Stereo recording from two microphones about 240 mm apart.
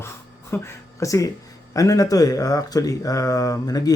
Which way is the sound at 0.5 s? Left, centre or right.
Centre.